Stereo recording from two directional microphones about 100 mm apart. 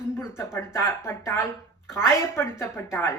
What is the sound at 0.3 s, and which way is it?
Speech, 25° left (ahead or behind).